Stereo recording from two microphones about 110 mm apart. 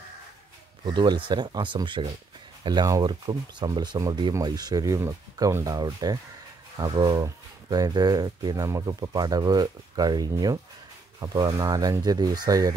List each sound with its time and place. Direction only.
0.8 s speech: 45° right (ahead or behind)